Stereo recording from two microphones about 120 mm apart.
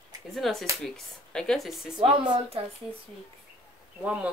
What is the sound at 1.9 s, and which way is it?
Speech, 40° right (ahead or behind).